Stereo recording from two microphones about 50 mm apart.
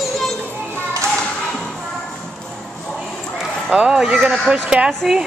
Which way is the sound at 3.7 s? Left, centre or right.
Centre.